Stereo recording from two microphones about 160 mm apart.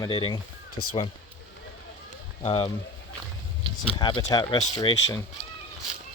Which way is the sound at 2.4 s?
35° left (ahead or behind).